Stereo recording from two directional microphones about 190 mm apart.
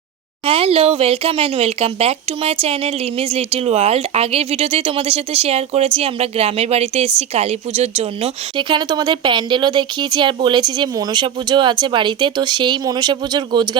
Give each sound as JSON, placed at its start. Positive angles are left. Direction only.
{"t": 0.4, "sound": "a woman's voice", "side_deg": -30}